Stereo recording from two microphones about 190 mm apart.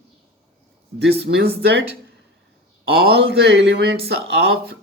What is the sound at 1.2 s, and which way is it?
Speech, 60° right (ahead or behind).